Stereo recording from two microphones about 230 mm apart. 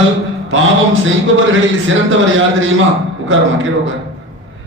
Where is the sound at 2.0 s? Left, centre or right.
Right.